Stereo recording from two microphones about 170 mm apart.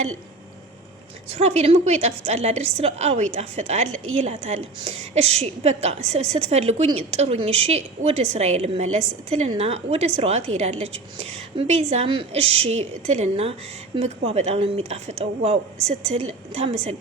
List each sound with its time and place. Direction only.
1.3 s a woman's voice: 40° right (ahead or behind)